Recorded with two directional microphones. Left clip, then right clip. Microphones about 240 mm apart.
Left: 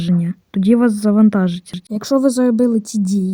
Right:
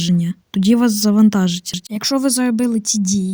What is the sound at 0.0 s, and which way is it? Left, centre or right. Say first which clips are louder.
Speech: right 1 dB; right.